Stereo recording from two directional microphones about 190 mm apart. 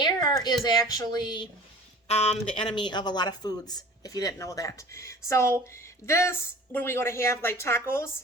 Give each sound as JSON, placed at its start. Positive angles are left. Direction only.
{"t": 0.0, "sound": "speech", "side_deg": 25}
{"t": 2.0, "sound": "speech", "side_deg": 35}